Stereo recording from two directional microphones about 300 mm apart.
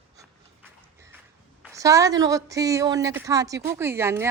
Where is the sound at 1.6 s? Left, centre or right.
Centre.